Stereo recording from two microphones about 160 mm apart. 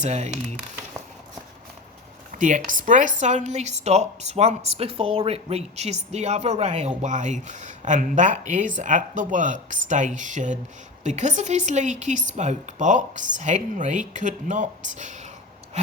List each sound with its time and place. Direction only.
0.0 s speech: 45° right (ahead or behind)
2.4 s speech: 55° right (ahead or behind)